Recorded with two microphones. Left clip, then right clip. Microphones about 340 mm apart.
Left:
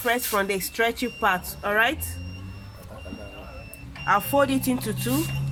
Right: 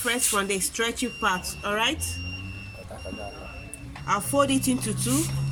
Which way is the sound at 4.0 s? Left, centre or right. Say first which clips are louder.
Left 3 dB; left.